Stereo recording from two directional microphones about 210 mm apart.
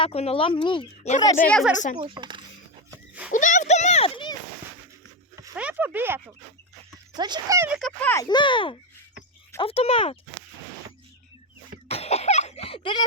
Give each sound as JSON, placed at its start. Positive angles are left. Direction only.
{"t": 0.0, "sound": "speech", "side_deg": 30}
{"t": 1.5, "sound": "speech", "side_deg": 5}
{"t": 2.0, "sound": "speech", "side_deg": -25}
{"t": 2.9, "sound": "goat", "side_deg": -5}
{"t": 3.3, "sound": "a sound", "side_deg": 35}
{"t": 5.4, "sound": "a sound", "side_deg": -5}
{"t": 7.1, "sound": "speech", "side_deg": -20}
{"t": 7.8, "sound": "speech", "side_deg": 5}
{"t": 8.1, "sound": "speech", "side_deg": 20}
{"t": 11.9, "sound": "a sound", "side_deg": 30}